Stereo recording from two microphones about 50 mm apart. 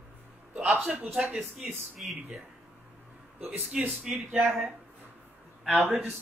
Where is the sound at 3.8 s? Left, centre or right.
Right.